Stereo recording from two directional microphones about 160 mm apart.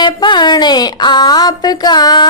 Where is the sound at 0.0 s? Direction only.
30° left (ahead or behind).